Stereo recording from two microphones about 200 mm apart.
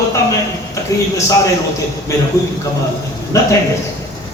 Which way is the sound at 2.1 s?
15° left (ahead or behind).